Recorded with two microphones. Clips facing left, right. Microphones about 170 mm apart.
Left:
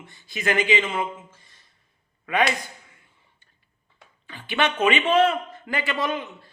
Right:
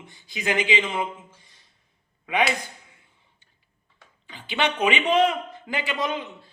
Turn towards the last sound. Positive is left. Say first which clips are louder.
# left 1 dB
turn(degrees=-20)  # may be behind; listen again after turning